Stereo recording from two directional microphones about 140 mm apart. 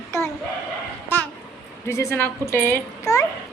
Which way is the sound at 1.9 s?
20° left (ahead or behind).